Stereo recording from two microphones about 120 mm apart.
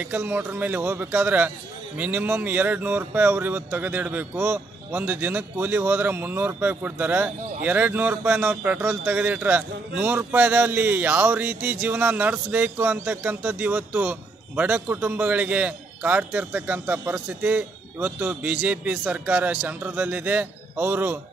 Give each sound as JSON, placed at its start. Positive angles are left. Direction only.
{"t": 0.0, "sound": "a man's voice", "side_deg": -15}